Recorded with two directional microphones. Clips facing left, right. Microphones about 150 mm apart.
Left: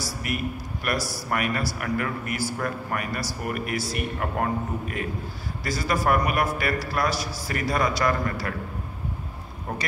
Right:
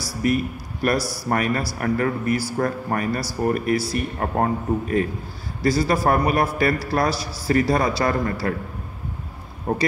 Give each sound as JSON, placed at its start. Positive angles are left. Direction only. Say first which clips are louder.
{"t": 0.2, "sound": "a man's voice", "louder": "right 11 dB", "side_deg": -35}
{"t": 0.9, "sound": "speech", "louder": "right 5 dB", "side_deg": -10}
{"t": 1.3, "sound": "a man's voice", "louder": "right 4 dB", "side_deg": -35}
{"t": 9.7, "sound": "a man's voice", "louder": "right 8 dB", "side_deg": -35}